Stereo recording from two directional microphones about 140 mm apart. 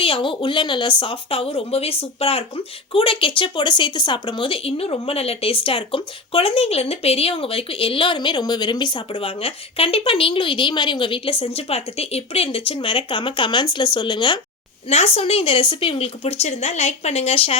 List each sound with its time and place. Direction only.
0.0 s speech: 40° left (ahead or behind)